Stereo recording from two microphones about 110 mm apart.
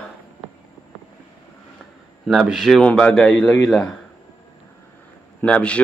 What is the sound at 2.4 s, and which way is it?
Speech, 5° right (ahead or behind).